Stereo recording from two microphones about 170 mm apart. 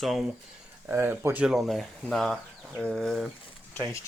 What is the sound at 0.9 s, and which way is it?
Speech, 15° right (ahead or behind).